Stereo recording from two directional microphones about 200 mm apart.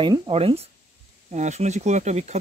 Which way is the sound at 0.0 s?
25° right (ahead or behind).